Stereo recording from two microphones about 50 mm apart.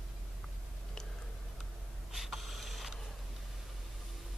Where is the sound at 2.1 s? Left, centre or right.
Centre.